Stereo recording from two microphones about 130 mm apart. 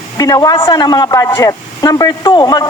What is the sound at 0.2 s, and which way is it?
A man's voice, 30° left (ahead or behind).